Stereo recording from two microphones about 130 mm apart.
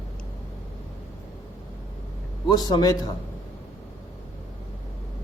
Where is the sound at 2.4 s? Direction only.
30° left (ahead or behind).